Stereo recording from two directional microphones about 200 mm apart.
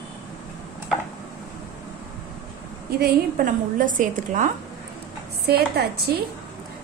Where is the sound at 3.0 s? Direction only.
40° right (ahead or behind).